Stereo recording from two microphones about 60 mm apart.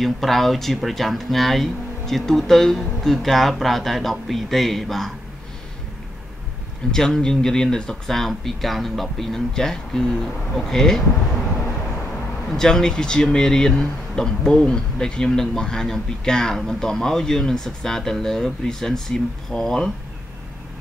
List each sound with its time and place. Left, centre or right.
0.0 s speech: centre
6.9 s speech: centre
12.4 s speech: centre